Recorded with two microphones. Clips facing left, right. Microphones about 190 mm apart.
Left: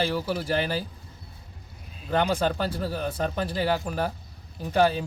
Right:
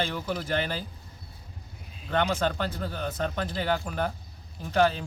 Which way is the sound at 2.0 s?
5° left (ahead or behind).